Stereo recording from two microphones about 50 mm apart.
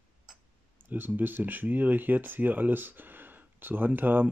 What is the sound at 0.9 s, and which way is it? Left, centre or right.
Speech, right.